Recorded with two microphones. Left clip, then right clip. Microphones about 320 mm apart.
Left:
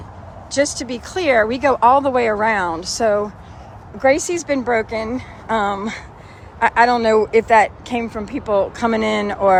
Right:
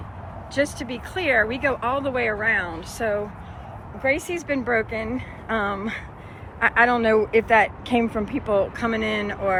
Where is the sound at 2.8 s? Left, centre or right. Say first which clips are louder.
Left 8 dB; centre.